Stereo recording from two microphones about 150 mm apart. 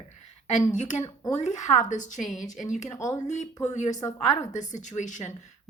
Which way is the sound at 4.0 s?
20° left (ahead or behind).